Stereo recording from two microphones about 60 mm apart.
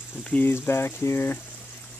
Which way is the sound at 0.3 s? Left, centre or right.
Left.